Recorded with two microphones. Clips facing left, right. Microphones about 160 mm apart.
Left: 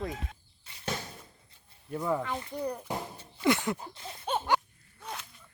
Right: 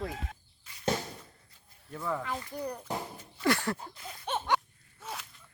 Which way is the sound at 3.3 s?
20° left (ahead or behind).